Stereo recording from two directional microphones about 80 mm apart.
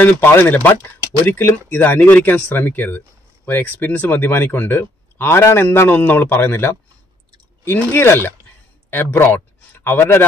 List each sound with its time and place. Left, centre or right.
0.0 s speech: left
2.5 s a man's voice: left